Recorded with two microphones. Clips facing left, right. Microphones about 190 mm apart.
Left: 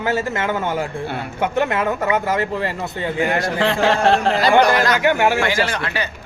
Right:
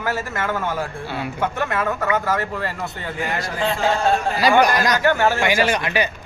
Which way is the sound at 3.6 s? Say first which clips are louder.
Left 2 dB; 85° left.